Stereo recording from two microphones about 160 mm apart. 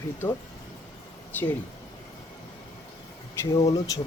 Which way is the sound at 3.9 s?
20° left (ahead or behind).